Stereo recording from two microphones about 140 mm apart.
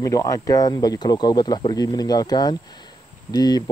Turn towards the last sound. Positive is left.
turn(degrees=30)  # may be behind; listen again after turning